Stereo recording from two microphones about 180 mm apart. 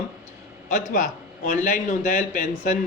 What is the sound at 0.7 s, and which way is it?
A man's voice, 45° left (ahead or behind).